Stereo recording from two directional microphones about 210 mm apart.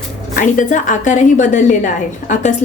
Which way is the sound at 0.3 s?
40° left (ahead or behind).